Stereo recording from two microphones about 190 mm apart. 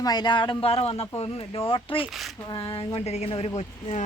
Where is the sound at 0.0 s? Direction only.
20° left (ahead or behind).